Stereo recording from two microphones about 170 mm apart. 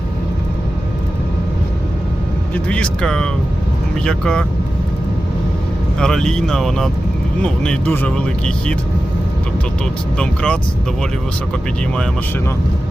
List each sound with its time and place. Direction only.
2.6 s speech: 5° left (ahead or behind)
6.0 s speech: 5° left (ahead or behind)
10.2 s speech: 5° left (ahead or behind)